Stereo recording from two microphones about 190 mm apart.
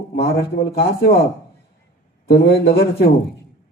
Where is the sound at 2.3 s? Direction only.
55° left (ahead or behind).